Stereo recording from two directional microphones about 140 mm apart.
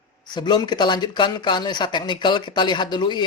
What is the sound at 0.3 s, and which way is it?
Speech, 30° left (ahead or behind).